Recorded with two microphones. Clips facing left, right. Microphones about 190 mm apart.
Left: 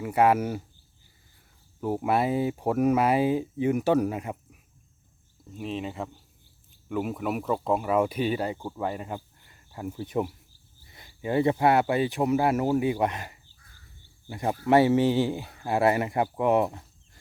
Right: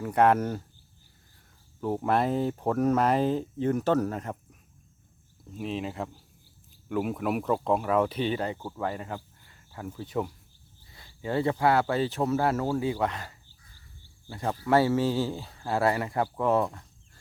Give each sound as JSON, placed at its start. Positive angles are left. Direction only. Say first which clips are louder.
{"t": 0.0, "sound": "speech", "louder": "even", "side_deg": 5}
{"t": 1.8, "sound": "speech", "louder": "left 1 dB", "side_deg": 10}
{"t": 5.5, "sound": "speech", "louder": "even", "side_deg": 0}